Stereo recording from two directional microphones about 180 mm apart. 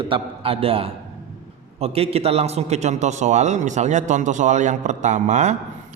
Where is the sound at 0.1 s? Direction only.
30° right (ahead or behind).